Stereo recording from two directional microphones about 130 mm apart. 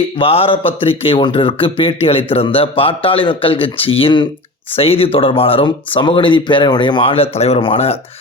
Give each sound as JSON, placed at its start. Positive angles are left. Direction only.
{"t": 0.2, "sound": "speech", "side_deg": 45}